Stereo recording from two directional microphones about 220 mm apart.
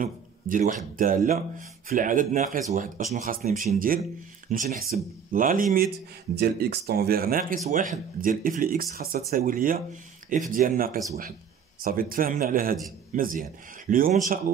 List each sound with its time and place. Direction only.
0.0 s speech: 40° right (ahead or behind)